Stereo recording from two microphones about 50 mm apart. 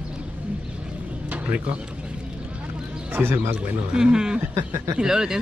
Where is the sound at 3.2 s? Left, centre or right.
Right.